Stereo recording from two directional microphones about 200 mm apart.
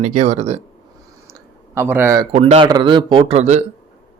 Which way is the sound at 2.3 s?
30° right (ahead or behind).